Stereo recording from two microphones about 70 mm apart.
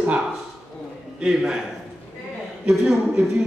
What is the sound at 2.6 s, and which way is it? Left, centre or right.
Mantra, centre.